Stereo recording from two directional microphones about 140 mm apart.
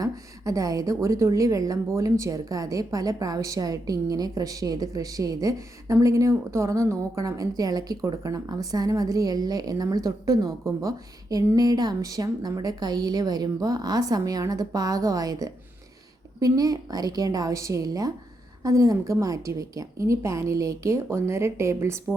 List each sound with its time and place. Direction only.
0.0 s a woman's voice: 25° right (ahead or behind)